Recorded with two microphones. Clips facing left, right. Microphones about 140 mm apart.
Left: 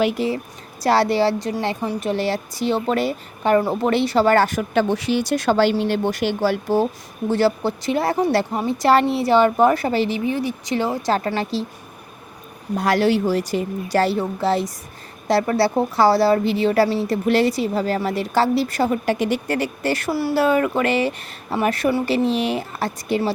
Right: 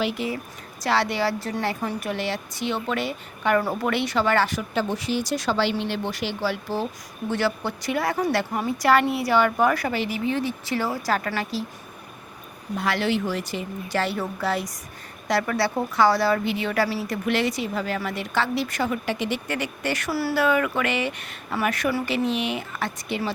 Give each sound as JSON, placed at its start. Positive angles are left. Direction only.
{"t": 0.2, "sound": "speech", "side_deg": 35}
{"t": 2.1, "sound": "speech", "side_deg": 35}
{"t": 3.6, "sound": "speech", "side_deg": 25}
{"t": 7.3, "sound": "speech", "side_deg": 30}
{"t": 10.2, "sound": "speech", "side_deg": 15}
{"t": 12.7, "sound": "speech", "side_deg": 40}
{"t": 14.2, "sound": "speech", "side_deg": 25}
{"t": 20.1, "sound": "speech", "side_deg": 20}
{"t": 20.3, "sound": "speech", "side_deg": 30}